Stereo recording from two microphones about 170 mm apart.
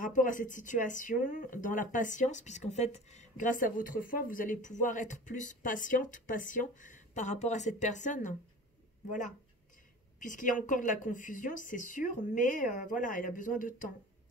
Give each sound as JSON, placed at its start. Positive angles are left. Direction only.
{"t": 0.0, "sound": "speech", "side_deg": 50}
{"t": 10.2, "sound": "speech", "side_deg": 50}